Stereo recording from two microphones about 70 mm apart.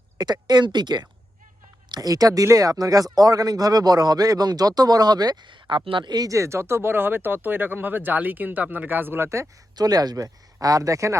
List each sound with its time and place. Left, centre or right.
0.2 s speech: right
1.9 s speech: right
6.2 s speech: right
9.7 s speech: right